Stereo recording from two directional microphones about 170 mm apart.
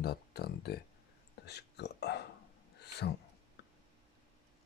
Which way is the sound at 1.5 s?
80° left.